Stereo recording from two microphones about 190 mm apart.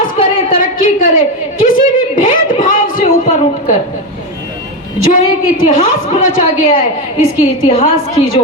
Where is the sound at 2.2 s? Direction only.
45° left (ahead or behind).